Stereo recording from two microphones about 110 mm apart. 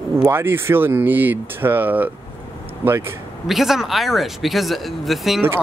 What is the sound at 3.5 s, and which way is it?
Speech, centre (ahead or behind).